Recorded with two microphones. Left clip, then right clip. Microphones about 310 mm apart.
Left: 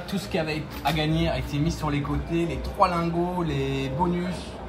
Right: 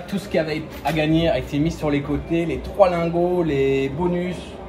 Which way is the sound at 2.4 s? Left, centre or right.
Centre.